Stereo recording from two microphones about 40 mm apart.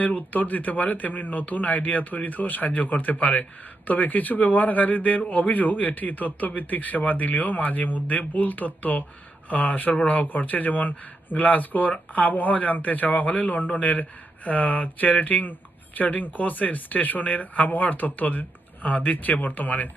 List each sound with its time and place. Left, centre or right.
0.0 s speech: left